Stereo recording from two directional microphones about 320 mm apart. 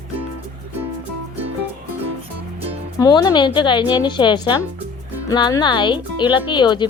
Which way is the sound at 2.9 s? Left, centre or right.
Centre.